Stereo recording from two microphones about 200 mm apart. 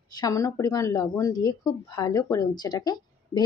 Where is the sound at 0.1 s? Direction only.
20° left (ahead or behind).